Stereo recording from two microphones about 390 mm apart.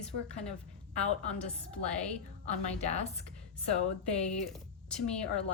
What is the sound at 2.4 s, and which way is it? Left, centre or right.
Speech, centre.